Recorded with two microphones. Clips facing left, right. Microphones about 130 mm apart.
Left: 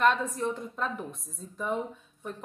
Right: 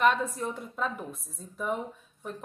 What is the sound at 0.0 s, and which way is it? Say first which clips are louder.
A woman's voice: even; 10° right (ahead or behind).